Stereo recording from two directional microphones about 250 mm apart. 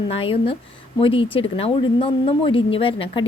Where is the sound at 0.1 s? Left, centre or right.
Left.